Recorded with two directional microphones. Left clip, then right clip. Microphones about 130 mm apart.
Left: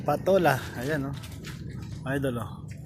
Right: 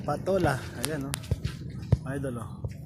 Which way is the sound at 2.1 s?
30° left (ahead or behind).